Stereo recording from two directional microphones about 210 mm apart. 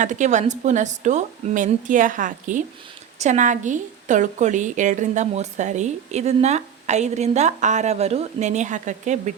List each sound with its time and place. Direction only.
0.0 s a woman's voice: 35° right (ahead or behind)